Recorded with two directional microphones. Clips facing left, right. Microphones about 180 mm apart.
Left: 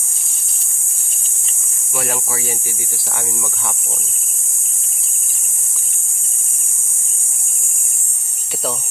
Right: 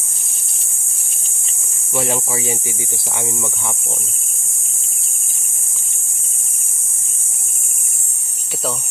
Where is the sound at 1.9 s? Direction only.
25° right (ahead or behind).